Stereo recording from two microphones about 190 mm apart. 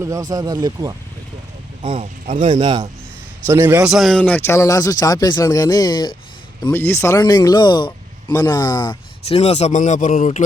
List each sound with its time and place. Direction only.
0.0 s speech: 20° right (ahead or behind)
1.8 s speech: 30° right (ahead or behind)
2.6 s a man's voice: 20° right (ahead or behind)
3.8 s speech: centre (ahead or behind); by 10.4 s 40° left (ahead or behind)